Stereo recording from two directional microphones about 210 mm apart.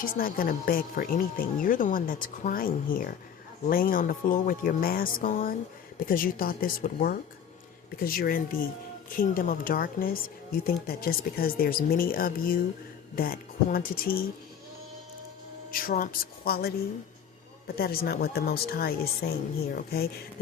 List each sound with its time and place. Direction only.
0.0 s speech: 45° left (ahead or behind)
15.7 s speech: 40° left (ahead or behind)
17.7 s speech: 45° left (ahead or behind)